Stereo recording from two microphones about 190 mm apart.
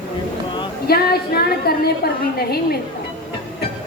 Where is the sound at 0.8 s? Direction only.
55° left (ahead or behind).